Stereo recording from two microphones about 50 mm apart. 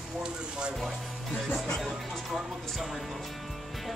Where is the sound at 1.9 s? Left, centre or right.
Centre.